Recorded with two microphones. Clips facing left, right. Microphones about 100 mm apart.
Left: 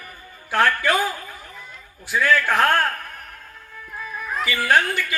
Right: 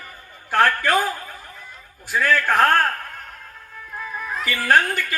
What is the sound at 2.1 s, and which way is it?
Speech, 40° right (ahead or behind).